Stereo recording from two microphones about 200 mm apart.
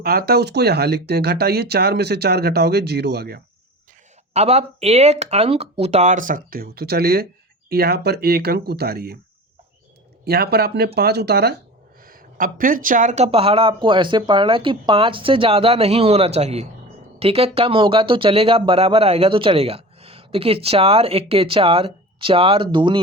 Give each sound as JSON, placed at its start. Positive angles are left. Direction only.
{"t": 0.0, "sound": "speech", "side_deg": -50}
{"t": 4.4, "sound": "speech", "side_deg": -30}
{"t": 10.2, "sound": "speech", "side_deg": -50}